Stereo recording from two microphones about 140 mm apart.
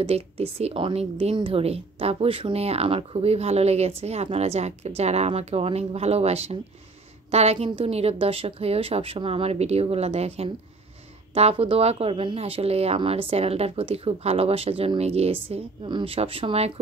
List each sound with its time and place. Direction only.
0.0 s speech: 45° right (ahead or behind)